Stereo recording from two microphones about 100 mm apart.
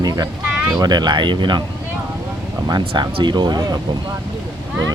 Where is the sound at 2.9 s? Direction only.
55° right (ahead or behind).